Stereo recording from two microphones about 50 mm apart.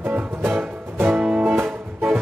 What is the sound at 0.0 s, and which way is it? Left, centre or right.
Music, right.